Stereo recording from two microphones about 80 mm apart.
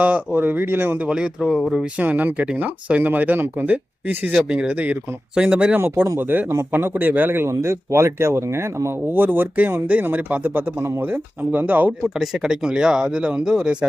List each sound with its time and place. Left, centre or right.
0.0 s speech: right
1.1 s speech: centre
2.0 s speech: centre
4.3 s speech: centre
5.7 s speech: right
9.1 s speech: right
12.0 s speech: centre